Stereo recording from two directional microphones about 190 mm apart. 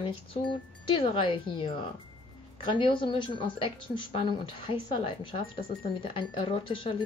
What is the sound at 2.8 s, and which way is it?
Speech, 25° left (ahead or behind).